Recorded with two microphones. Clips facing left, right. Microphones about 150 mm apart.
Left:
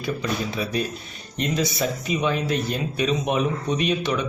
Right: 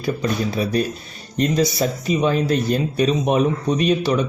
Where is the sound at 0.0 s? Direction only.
40° right (ahead or behind).